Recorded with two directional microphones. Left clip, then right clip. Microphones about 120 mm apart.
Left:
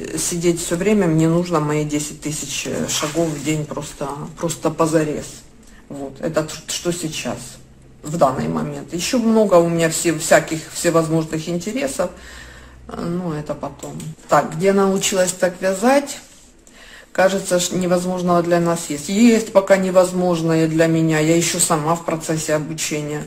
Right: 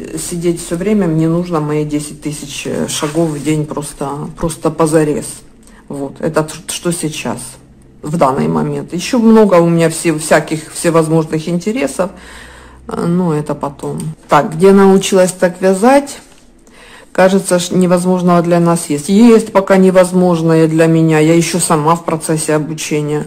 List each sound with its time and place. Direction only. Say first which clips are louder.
0.0 s speech: right 2 dB; 5° left (ahead or behind)
2.4 s speech: right 1 dB; 25° right (ahead or behind)
2.9 s speech: right 4 dB; 35° right (ahead or behind)
6.2 s speech: right 6 dB; 50° right (ahead or behind)
8.2 s speech: right 5 dB; 40° right (ahead or behind)
12.8 s speech: right 10 dB; 65° right (ahead or behind)
14.3 s speech: right 7 dB; 45° right (ahead or behind)